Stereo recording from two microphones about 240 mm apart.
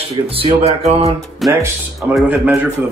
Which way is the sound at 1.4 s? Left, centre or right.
Centre.